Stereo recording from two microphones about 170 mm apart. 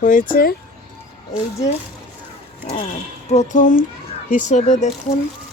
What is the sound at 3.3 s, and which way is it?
Speech, 45° left (ahead or behind).